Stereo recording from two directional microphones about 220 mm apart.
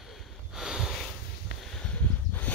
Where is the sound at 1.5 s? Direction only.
45° left (ahead or behind).